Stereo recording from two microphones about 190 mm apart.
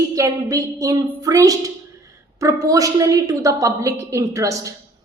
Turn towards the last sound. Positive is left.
turn(degrees=-15)  # may be behind; listen again after turning